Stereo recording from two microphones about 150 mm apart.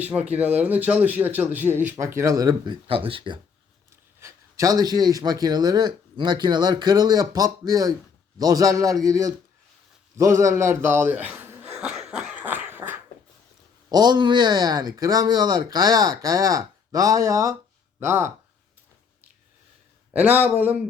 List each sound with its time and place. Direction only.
0.0 s speech: 10° right (ahead or behind)
2.8 s speech: 35° right (ahead or behind)
4.2 s a man's voice: 20° right (ahead or behind)
11.9 s cough: 5° right (ahead or behind)
13.9 s a man's voice: 30° right (ahead or behind)
20.1 s speech: 10° right (ahead or behind)